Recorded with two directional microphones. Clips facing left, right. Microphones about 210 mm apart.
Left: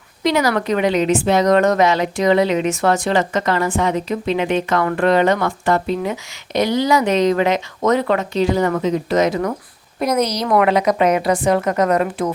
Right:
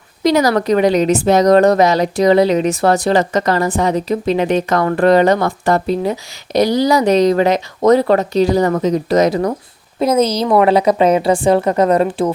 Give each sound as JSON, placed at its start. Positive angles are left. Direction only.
{"t": 0.2, "sound": "a woman's voice", "side_deg": -40}